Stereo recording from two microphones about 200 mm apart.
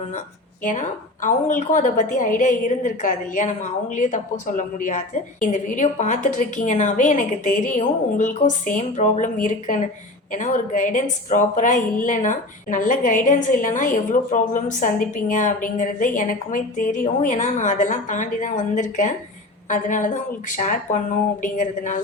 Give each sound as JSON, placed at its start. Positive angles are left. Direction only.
{"t": 0.6, "sound": "a woman's voice", "side_deg": 40}